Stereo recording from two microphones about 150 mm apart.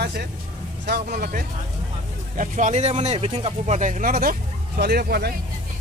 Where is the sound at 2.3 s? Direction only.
60° right (ahead or behind); by 5.3 s 90° right.